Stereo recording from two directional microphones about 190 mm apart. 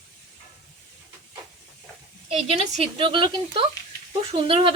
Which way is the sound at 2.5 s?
35° right (ahead or behind).